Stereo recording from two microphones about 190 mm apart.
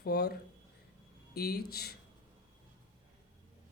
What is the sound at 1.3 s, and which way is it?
Speech, 55° left (ahead or behind).